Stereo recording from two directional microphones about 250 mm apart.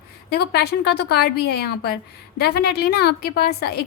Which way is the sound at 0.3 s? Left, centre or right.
Left.